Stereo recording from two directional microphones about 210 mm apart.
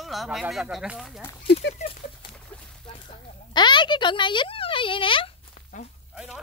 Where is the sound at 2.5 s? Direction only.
5° left (ahead or behind).